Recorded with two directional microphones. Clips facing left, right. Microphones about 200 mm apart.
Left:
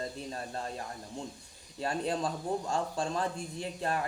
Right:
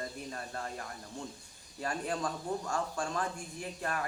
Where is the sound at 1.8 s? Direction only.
25° left (ahead or behind).